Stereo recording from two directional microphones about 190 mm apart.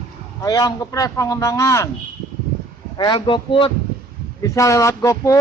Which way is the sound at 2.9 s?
25° left (ahead or behind).